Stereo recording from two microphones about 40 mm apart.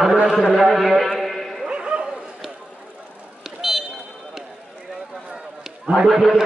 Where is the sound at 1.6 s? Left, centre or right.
Right.